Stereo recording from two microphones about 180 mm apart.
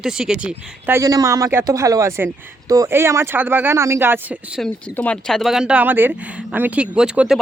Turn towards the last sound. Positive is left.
turn(degrees=-5)  # may be behind; listen again after turning